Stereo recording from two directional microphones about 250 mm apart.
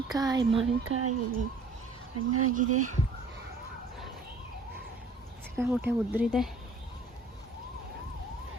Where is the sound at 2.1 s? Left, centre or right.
Right.